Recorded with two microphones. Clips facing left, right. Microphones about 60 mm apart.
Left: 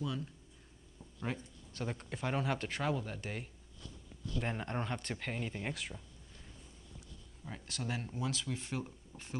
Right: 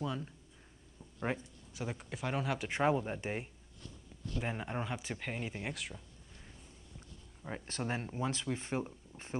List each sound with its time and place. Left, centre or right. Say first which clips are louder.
1.3 s speech: right 4 dB; right
1.7 s speech: even; centre
2.7 s speech: right 5 dB; right
4.4 s speech: even; centre
7.4 s speech: right 3 dB; right